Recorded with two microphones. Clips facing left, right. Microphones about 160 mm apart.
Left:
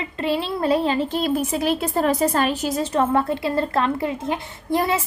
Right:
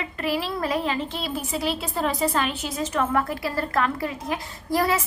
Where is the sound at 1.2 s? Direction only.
50° left (ahead or behind).